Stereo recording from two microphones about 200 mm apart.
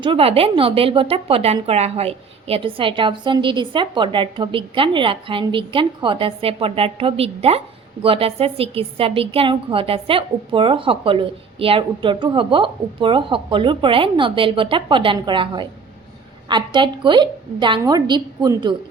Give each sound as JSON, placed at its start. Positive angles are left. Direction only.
{"t": 0.0, "sound": "a woman's voice", "side_deg": -25}